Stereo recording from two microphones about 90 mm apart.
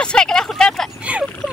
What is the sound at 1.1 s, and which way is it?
Speech, 15° right (ahead or behind).